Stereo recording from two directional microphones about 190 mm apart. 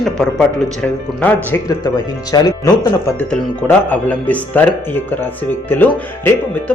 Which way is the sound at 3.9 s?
10° left (ahead or behind).